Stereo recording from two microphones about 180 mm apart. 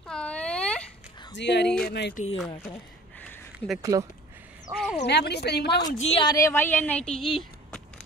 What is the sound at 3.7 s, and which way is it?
Speech, 20° right (ahead or behind).